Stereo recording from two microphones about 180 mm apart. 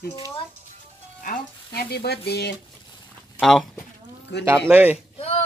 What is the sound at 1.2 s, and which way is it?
Speech, 60° left (ahead or behind).